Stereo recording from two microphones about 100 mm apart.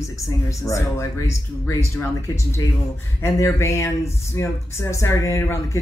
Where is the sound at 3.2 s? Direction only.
30° left (ahead or behind).